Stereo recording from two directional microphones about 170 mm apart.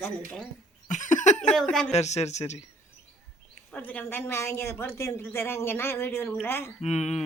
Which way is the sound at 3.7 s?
10° left (ahead or behind).